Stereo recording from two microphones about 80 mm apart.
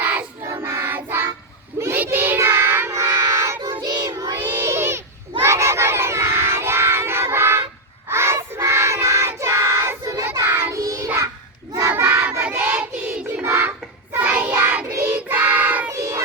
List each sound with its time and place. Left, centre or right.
0.0 s child singing: centre
0.4 s child singing: right
3.2 s child singing: right
3.7 s child singing: right
4.4 s child singing: right
4.7 s a sound: right
5.4 s child singing: right
10.7 s child singing: right
11.9 s child singing: right
13.4 s child singing: right
14.3 s child singing: centre
15.9 s child singing: right